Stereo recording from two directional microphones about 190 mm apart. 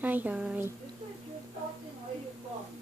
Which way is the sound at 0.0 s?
10° right (ahead or behind).